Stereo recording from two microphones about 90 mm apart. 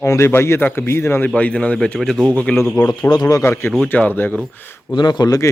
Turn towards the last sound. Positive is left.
turn(degrees=50)  # may be behind; listen again after turning